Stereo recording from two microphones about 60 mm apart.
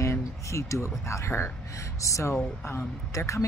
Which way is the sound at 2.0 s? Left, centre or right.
Left.